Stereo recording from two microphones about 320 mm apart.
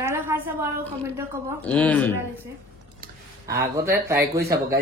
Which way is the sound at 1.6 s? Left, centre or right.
Centre.